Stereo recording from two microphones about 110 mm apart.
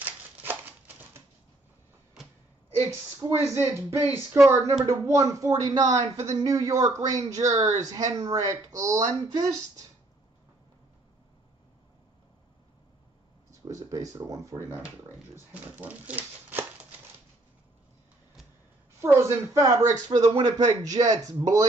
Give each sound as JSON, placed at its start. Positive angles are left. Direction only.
{"t": 0.0, "sound": "a sound", "side_deg": -15}
{"t": 2.9, "sound": "speech", "side_deg": -25}
{"t": 13.5, "sound": "speech", "side_deg": -30}
{"t": 15.5, "sound": "speech", "side_deg": -15}
{"t": 18.9, "sound": "speech", "side_deg": -25}
{"t": 20.1, "sound": "speech", "side_deg": -45}